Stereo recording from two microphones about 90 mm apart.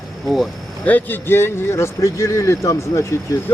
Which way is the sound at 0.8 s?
20° left (ahead or behind).